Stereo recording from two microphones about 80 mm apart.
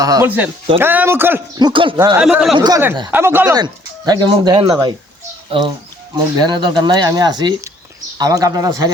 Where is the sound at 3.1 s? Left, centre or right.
Right.